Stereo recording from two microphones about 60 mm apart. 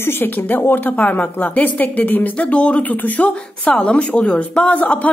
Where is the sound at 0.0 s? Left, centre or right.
Left.